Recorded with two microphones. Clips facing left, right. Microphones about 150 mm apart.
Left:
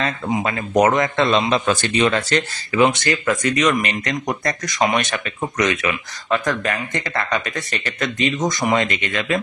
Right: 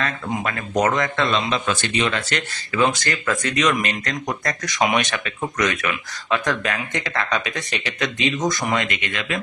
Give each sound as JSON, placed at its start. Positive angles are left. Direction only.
{"t": 0.0, "sound": "a man's voice", "side_deg": 20}
{"t": 2.7, "sound": "speech", "side_deg": 25}
{"t": 3.4, "sound": "speech", "side_deg": 5}
{"t": 4.8, "sound": "speech", "side_deg": -15}
{"t": 5.1, "sound": "speech", "side_deg": 20}
{"t": 5.9, "sound": "speech", "side_deg": 10}
{"t": 7.4, "sound": "speech", "side_deg": -5}
{"t": 8.4, "sound": "speech", "side_deg": 15}
{"t": 8.7, "sound": "a man's voice", "side_deg": 35}